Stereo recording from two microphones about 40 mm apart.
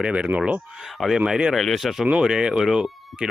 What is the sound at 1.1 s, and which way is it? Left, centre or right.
Speech, centre.